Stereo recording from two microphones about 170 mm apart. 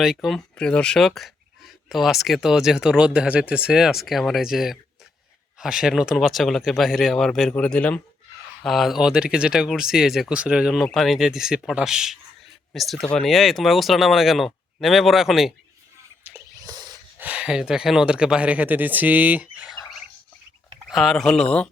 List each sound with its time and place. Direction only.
0.0 s speech: centre (ahead or behind)
16.2 s a sound: 10° right (ahead or behind)
16.6 s dog: 25° right (ahead or behind)
17.2 s speech: 5° right (ahead or behind)
20.9 s speech: centre (ahead or behind)